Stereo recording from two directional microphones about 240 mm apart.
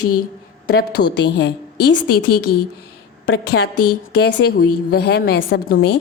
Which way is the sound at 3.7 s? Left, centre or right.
Left.